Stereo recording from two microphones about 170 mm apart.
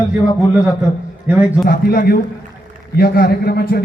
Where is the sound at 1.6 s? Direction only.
60° left (ahead or behind).